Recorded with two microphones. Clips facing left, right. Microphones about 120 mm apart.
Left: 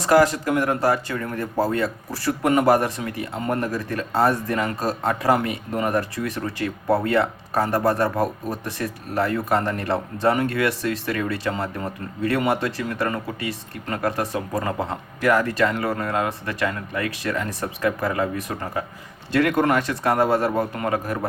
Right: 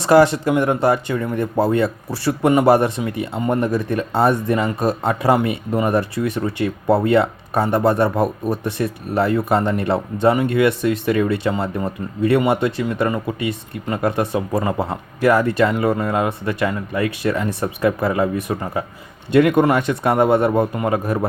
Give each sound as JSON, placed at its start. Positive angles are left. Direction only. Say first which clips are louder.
{"t": 0.0, "sound": "speech", "louder": "right 4 dB", "side_deg": -25}